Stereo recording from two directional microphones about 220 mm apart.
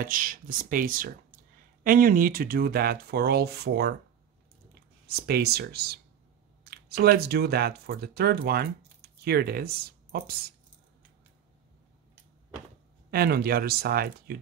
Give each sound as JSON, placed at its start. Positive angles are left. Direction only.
{"t": 0.0, "sound": "speech", "side_deg": -40}
{"t": 5.0, "sound": "speech", "side_deg": -45}
{"t": 13.1, "sound": "speech", "side_deg": -45}